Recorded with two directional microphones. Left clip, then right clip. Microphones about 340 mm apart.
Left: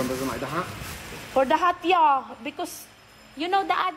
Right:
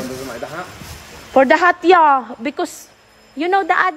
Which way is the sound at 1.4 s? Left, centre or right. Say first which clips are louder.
Right 9 dB; right.